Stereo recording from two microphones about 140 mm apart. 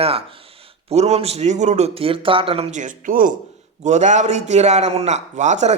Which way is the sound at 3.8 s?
55° right (ahead or behind).